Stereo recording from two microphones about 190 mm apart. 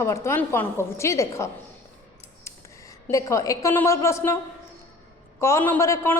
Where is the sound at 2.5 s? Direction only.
15° left (ahead or behind).